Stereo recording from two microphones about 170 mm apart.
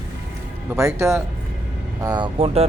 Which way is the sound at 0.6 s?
15° right (ahead or behind).